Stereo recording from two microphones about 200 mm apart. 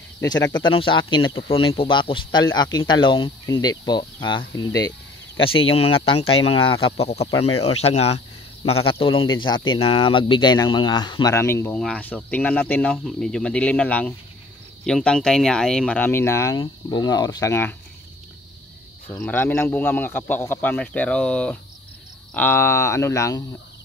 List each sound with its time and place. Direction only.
0.2 s speech: 20° left (ahead or behind)
19.0 s speech: 10° left (ahead or behind)